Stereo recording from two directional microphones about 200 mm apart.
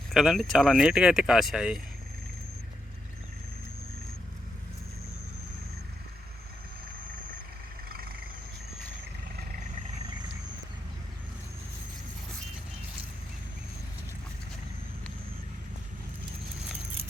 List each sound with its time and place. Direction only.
0.1 s speech: centre (ahead or behind)
7.9 s vehicle: 50° right (ahead or behind)